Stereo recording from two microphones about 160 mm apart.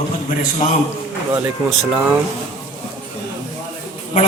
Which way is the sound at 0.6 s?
50° left (ahead or behind).